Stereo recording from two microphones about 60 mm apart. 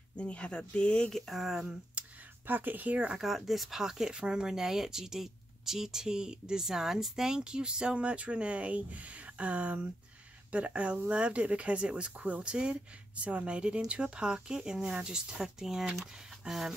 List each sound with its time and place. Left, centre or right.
0.2 s speech: centre
1.1 s speech: centre
2.0 s a sound: centre
2.4 s speech: right
3.2 s speech: centre